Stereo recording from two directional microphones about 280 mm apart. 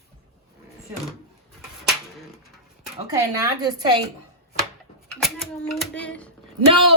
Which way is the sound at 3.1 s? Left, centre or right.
Centre.